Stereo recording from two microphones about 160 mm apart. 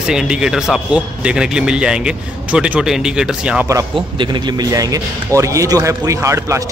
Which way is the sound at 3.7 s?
25° right (ahead or behind).